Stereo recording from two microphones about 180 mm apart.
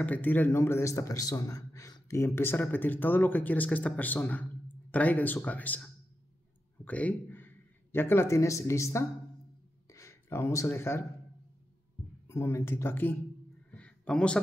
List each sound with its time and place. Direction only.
0.0 s a man's voice: 10° left (ahead or behind)
12.3 s a man's voice: 15° left (ahead or behind)
13.7 s a sound: 5° left (ahead or behind)